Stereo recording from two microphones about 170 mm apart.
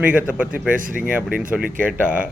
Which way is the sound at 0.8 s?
55° right (ahead or behind).